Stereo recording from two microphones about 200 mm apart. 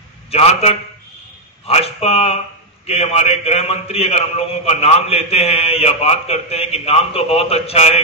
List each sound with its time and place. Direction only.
0.3 s a man's voice: 30° left (ahead or behind)